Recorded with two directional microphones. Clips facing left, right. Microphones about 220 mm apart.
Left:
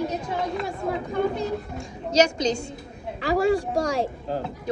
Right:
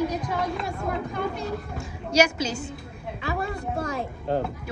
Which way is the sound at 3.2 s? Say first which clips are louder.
Left 9 dB; 85° left.